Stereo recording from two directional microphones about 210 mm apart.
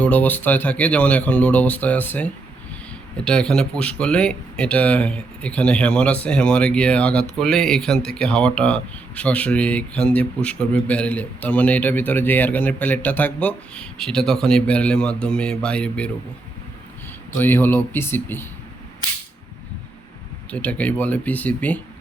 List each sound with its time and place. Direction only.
0.0 s speech: 5° left (ahead or behind)
17.3 s speech: 10° left (ahead or behind)
20.5 s speech: 5° left (ahead or behind)